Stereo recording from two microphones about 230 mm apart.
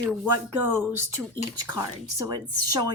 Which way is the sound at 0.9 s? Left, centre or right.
Centre.